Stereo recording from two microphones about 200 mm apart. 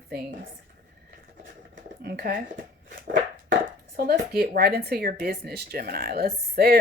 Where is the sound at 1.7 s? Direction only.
55° right (ahead or behind).